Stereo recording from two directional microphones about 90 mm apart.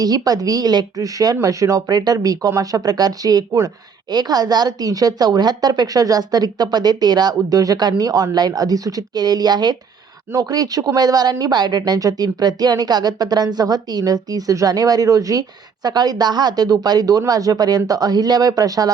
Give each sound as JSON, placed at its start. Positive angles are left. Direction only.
{"t": 0.0, "sound": "speech", "side_deg": -45}